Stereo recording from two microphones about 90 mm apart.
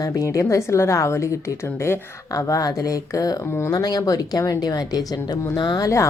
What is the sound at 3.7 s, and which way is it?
Speech, 45° left (ahead or behind).